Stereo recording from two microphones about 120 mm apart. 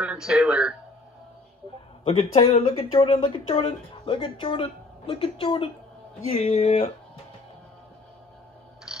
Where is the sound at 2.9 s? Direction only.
45° left (ahead or behind).